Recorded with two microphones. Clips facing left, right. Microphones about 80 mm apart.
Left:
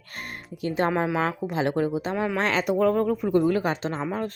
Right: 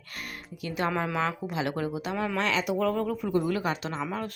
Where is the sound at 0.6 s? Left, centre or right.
Left.